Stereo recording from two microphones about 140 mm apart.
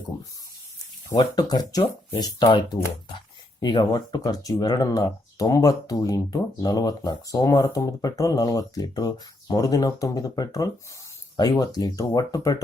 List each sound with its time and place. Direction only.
1.1 s speech: 30° left (ahead or behind)